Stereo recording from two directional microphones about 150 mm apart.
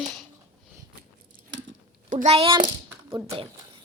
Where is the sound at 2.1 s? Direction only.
60° right (ahead or behind).